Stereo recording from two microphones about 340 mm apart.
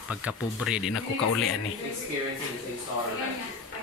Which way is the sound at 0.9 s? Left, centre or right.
Left.